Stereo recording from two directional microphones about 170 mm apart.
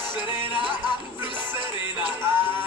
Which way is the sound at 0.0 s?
25° left (ahead or behind).